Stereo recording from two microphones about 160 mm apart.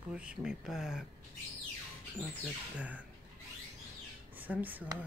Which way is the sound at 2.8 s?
10° right (ahead or behind).